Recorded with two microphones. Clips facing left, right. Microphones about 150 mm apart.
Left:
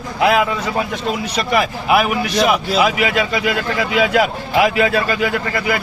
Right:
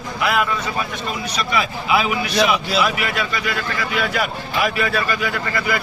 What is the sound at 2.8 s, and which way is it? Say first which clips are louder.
Speech: left 5 dB; 90° left.